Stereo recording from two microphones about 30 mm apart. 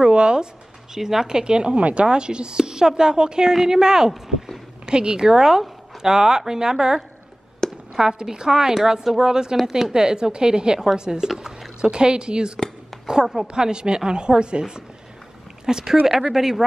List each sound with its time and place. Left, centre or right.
0.0 s speech: right
0.9 s a woman's voice: centre
1.8 s speech: right
2.0 s a woman's voice: right
4.1 s speech: centre
4.8 s a woman's voice: right
9.3 s a woman's voice: right
15.7 s speech: centre